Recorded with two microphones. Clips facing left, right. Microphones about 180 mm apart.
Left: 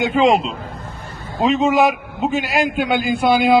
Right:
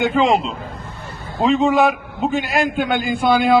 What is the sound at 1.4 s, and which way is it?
A man's voice, 20° left (ahead or behind).